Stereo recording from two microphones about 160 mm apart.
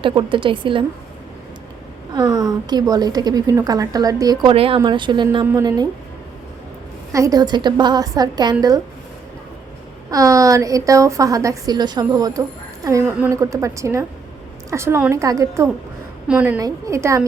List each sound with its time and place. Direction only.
0.0 s a woman's voice: 30° right (ahead or behind)
2.1 s a woman's voice: 25° right (ahead or behind)
7.1 s a woman's voice: 20° right (ahead or behind)
10.1 s a woman's voice: 20° right (ahead or behind)
16.2 s speech: 10° right (ahead or behind)
16.6 s a woman's voice: 20° right (ahead or behind)